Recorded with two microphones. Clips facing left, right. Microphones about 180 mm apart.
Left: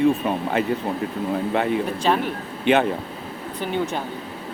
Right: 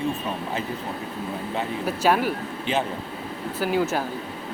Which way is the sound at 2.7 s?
65° left (ahead or behind).